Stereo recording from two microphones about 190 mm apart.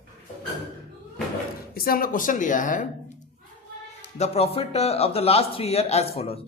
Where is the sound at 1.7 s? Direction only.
50° left (ahead or behind).